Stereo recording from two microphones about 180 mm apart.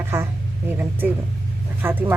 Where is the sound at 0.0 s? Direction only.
15° right (ahead or behind).